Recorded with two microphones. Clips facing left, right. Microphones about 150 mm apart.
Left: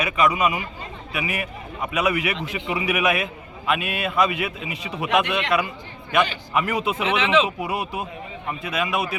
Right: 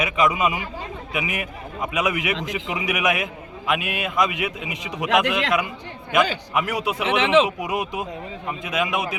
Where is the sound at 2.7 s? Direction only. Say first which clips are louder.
Left 2 dB; 15° right (ahead or behind).